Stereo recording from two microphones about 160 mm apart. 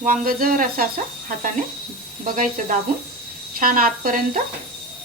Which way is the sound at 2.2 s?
60° right (ahead or behind).